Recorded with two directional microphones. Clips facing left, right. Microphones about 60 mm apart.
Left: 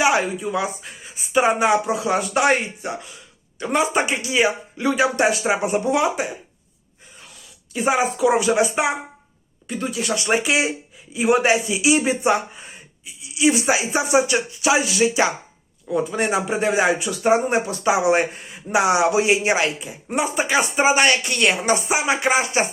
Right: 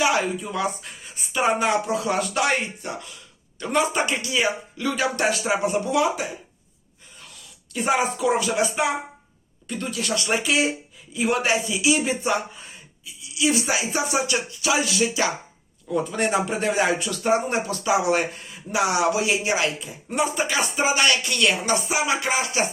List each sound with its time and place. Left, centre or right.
0.3 s a man's voice: centre
7.7 s speech: centre
8.4 s a man's voice: left
9.6 s a man's voice: centre; by 15.3 s left
15.9 s a man's voice: centre; by 22.7 s left